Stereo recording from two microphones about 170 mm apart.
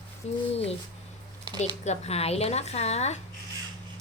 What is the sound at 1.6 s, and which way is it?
A woman's voice, 40° left (ahead or behind).